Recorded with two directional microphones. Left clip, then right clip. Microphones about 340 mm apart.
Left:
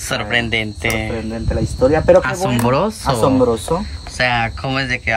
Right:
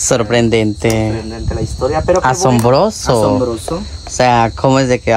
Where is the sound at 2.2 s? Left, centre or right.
Centre.